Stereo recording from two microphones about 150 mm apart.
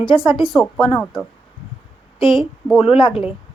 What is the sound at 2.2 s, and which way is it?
Speech, 30° left (ahead or behind).